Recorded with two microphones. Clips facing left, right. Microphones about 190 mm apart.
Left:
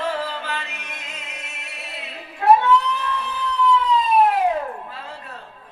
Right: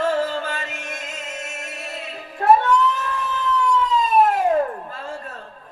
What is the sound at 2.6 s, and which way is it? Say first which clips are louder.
Cat: even; 45° right (ahead or behind).